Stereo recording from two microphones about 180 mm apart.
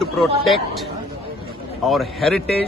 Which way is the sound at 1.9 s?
Centre (ahead or behind).